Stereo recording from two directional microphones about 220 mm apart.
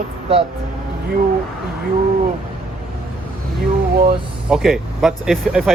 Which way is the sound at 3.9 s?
45° right (ahead or behind).